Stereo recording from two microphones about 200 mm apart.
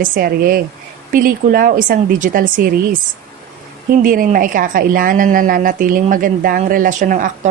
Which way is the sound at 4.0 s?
45° right (ahead or behind).